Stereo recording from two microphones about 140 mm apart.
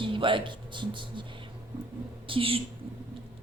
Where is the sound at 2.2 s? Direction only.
40° right (ahead or behind).